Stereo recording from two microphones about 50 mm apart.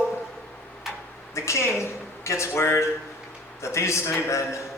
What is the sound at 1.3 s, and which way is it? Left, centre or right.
A man's voice, left.